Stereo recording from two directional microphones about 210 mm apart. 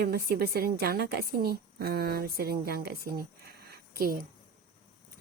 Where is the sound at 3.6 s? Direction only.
45° right (ahead or behind).